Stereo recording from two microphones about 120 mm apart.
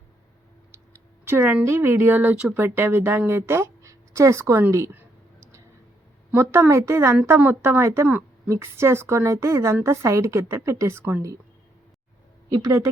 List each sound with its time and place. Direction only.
1.2 s speech: 15° right (ahead or behind)
12.5 s a woman's voice: 30° right (ahead or behind)